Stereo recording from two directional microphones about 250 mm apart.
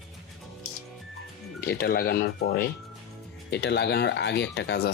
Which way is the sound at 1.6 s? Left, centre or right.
Left.